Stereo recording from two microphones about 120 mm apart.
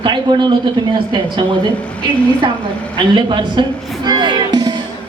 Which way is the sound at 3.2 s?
40° right (ahead or behind).